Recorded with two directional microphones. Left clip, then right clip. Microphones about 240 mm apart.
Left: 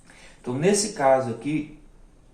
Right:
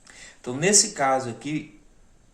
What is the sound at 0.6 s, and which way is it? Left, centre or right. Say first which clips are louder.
Speech: even; right.